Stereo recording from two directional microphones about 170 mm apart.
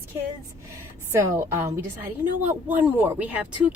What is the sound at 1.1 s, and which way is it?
A woman's voice, 15° right (ahead or behind).